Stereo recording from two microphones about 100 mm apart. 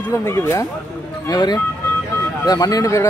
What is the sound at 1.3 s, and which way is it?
Speech, 45° left (ahead or behind).